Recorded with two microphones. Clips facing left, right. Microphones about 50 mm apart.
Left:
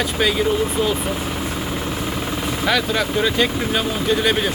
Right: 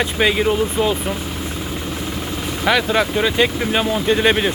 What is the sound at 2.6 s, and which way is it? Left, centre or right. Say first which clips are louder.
Speech: right 4 dB; centre.